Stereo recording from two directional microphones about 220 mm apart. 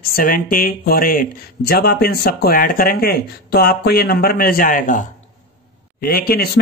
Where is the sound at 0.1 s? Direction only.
40° left (ahead or behind).